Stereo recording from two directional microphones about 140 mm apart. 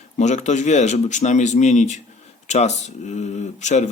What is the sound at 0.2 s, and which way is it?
A man's voice, 55° left (ahead or behind).